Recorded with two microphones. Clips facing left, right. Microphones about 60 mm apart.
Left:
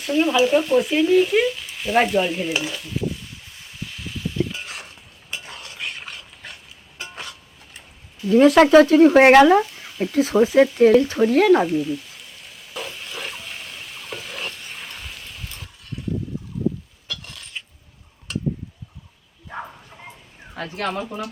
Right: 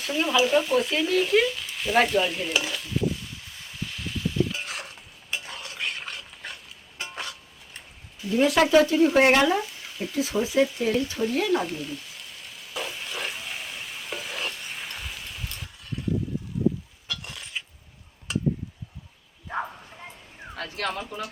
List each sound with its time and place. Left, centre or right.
0.0 s speech: centre
3.6 s stir: centre
7.0 s a sound: centre
8.4 s speech: left
10.2 s speech: left
11.6 s frying: centre
17.1 s a sound: centre
20.6 s speech: centre